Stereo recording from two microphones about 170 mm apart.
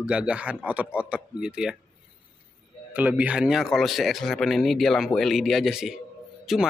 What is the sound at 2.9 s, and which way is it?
A man's voice, 10° right (ahead or behind).